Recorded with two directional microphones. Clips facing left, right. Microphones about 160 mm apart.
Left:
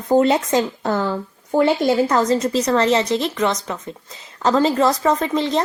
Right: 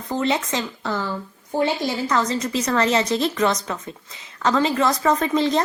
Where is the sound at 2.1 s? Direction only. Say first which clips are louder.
Left 5 dB; 45° left (ahead or behind).